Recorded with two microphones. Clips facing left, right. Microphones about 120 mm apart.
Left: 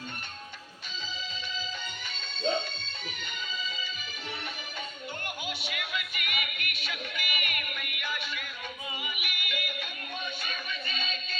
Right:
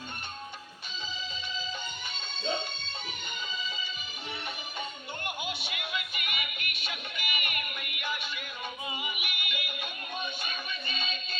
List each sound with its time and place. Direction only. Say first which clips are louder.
2.1 s music: left 4 dB; 20° right (ahead or behind)
5.2 s music: right 3 dB; 20° right (ahead or behind)